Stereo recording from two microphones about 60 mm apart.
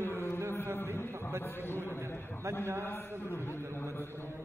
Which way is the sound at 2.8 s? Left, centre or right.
Left.